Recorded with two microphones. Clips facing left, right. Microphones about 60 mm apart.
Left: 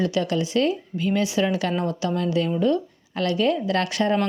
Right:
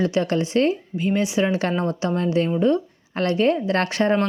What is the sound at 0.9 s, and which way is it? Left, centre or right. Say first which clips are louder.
A woman's voice: right 1 dB; right.